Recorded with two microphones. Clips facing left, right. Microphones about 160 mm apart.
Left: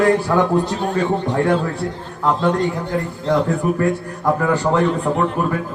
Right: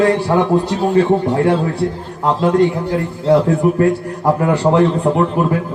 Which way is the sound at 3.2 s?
35° right (ahead or behind).